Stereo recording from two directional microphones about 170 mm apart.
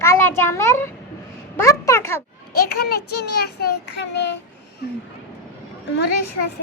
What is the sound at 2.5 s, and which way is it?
Child singing, 65° left (ahead or behind).